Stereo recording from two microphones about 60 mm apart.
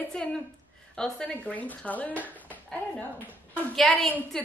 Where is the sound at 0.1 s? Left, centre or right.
Centre.